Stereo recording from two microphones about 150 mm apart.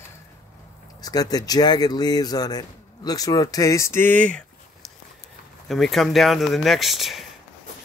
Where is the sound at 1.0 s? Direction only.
25° left (ahead or behind); by 4.4 s 10° left (ahead or behind).